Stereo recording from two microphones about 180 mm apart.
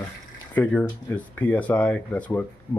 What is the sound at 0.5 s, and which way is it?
Speech, 5° left (ahead or behind).